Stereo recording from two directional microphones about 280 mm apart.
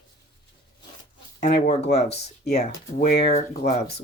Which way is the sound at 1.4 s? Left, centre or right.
Left.